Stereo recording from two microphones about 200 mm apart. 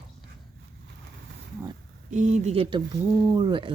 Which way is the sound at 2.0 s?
35° right (ahead or behind).